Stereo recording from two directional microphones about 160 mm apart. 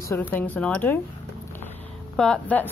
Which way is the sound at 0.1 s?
15° left (ahead or behind).